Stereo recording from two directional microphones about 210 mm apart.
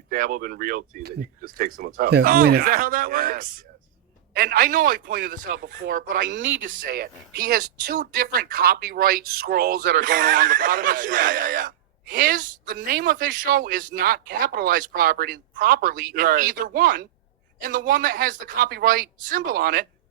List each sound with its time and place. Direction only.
0.1 s speech: 40° right (ahead or behind); by 6.7 s 60° right (ahead or behind)
6.7 s speech: 40° right (ahead or behind)